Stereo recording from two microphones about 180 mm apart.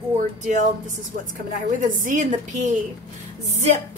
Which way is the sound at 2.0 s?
45° right (ahead or behind).